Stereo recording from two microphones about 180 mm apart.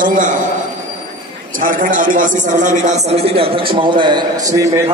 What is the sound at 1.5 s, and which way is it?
A man's voice, 50° right (ahead or behind).